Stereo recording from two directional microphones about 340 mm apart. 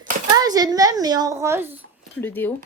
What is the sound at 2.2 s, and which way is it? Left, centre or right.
Speech, centre.